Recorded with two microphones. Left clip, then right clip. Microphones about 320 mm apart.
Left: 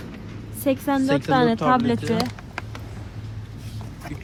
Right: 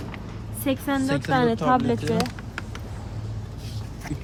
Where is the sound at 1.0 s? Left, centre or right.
Centre.